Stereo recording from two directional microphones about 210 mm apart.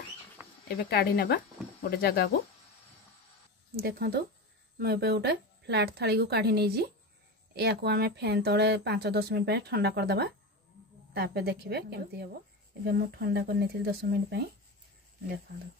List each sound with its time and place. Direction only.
0.7 s speech: 50° left (ahead or behind)
3.7 s speech: 45° right (ahead or behind)